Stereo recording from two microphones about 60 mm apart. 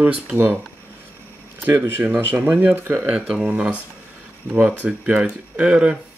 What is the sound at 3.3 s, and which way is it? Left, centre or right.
Speech, centre.